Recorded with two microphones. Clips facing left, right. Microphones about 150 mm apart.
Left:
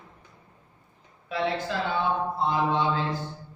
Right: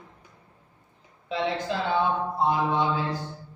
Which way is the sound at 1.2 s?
20° right (ahead or behind).